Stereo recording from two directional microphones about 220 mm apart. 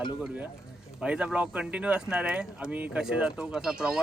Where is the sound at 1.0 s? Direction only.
5° right (ahead or behind).